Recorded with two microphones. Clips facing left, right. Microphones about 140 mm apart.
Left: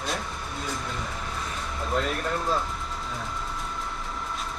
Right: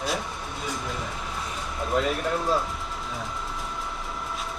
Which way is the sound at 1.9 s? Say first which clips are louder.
Right 3 dB; centre (ahead or behind).